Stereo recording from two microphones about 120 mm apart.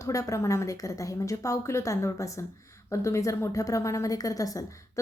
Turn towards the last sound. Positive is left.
turn(degrees=30)  # may be behind; listen again after turning